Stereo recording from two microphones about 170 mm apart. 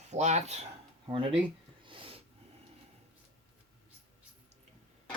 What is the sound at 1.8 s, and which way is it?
Wheeze, 30° right (ahead or behind).